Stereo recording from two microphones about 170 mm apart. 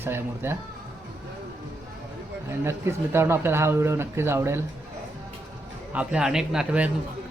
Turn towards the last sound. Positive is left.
turn(degrees=-5)  # may be behind; listen again after turning